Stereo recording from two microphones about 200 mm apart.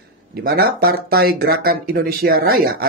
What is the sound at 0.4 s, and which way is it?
Speech, 50° right (ahead or behind).